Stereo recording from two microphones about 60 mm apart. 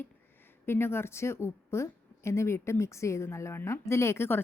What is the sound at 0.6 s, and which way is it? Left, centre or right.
A woman's voice, left.